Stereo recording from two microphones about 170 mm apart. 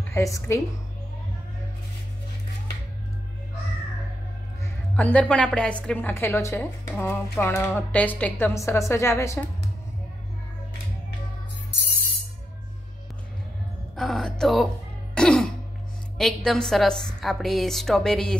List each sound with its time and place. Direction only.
0.1 s a woman's voice: 15° left (ahead or behind)
4.9 s a woman's voice: 10° left (ahead or behind)
13.9 s speech: centre (ahead or behind)
15.1 s throat clearing: 5° left (ahead or behind)
16.2 s a woman's voice: centre (ahead or behind)